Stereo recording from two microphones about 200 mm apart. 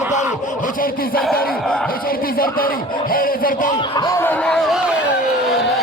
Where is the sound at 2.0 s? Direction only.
45° left (ahead or behind).